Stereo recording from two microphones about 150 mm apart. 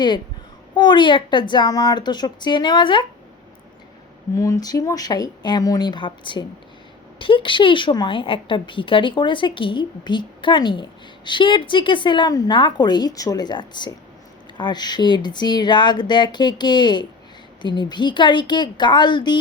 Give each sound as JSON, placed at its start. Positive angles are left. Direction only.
{"t": 0.8, "sound": "a woman's voice", "side_deg": 30}
{"t": 4.4, "sound": "a woman's voice", "side_deg": 20}